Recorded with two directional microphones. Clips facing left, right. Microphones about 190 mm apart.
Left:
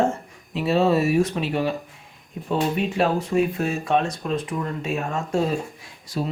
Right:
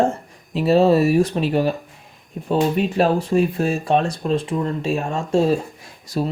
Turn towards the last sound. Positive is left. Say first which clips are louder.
# right 4 dB
turn(degrees=-40)  # may be behind; listen again after turning